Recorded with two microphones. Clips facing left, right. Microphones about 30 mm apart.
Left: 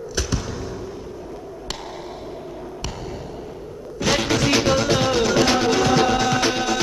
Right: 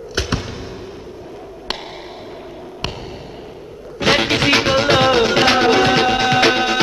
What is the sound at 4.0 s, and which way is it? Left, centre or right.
Music, right.